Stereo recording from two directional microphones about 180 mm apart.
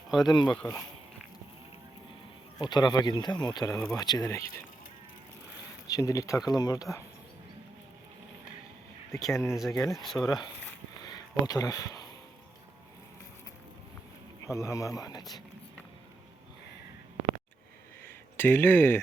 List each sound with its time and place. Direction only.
0.3 s speech: 25° left (ahead or behind)
0.5 s speech: 5° left (ahead or behind)
2.6 s speech: 25° left (ahead or behind)
5.9 s speech: 20° left (ahead or behind)
9.1 s speech: 15° left (ahead or behind)
10.0 s speech: centre (ahead or behind)
10.2 s speech: 20° left (ahead or behind)
11.0 s a sound: 20° left (ahead or behind)
14.4 s speech: 15° left (ahead or behind)
18.0 s a sound: 10° left (ahead or behind)